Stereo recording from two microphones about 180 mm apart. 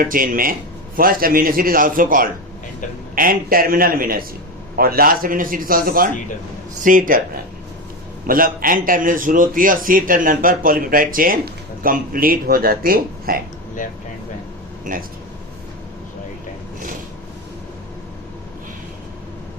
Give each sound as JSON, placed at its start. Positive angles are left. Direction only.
{"t": 0.0, "sound": "a man's voice", "side_deg": -50}
{"t": 8.3, "sound": "a man's voice", "side_deg": -50}
{"t": 14.9, "sound": "a man's voice", "side_deg": -45}